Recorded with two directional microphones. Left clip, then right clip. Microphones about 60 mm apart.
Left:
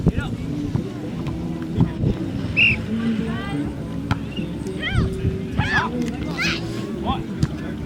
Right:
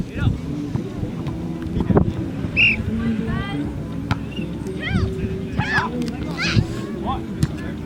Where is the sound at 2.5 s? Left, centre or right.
Centre.